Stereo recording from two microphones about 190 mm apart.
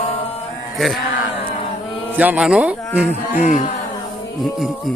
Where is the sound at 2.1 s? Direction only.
10° right (ahead or behind).